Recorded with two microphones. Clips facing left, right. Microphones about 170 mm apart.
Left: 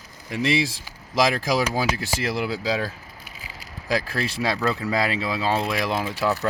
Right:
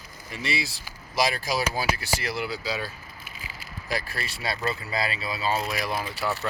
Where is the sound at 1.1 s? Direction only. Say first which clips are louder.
Left 5 dB; 90° left.